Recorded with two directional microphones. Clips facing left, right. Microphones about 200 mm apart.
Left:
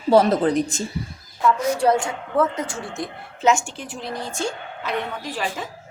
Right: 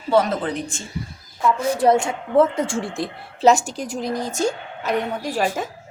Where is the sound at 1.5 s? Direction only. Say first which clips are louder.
Right 5 dB; 25° right (ahead or behind).